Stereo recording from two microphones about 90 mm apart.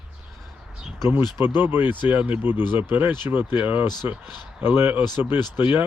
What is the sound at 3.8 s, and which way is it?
Speech, 50° left (ahead or behind).